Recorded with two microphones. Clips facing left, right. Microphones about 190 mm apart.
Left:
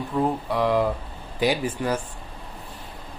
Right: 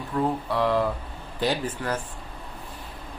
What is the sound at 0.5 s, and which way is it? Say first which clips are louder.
Speech: left 2 dB; 15° left (ahead or behind).